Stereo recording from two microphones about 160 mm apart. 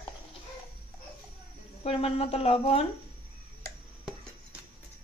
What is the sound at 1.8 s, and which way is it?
Speech, 35° left (ahead or behind).